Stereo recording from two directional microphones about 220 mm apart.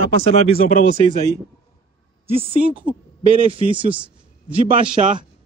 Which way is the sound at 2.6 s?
35° right (ahead or behind).